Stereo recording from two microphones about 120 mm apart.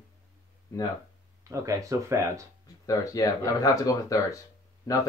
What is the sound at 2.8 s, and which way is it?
Speech, 30° left (ahead or behind).